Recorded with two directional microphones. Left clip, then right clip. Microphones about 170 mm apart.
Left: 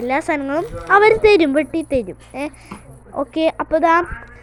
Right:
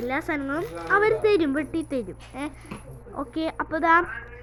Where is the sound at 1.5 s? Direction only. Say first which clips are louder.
Left 9 dB; 25° left (ahead or behind).